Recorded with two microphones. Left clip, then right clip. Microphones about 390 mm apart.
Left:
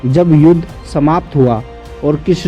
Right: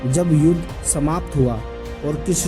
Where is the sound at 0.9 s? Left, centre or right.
Right.